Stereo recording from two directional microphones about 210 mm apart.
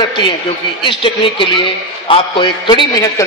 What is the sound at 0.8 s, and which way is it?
A man's voice, 25° left (ahead or behind).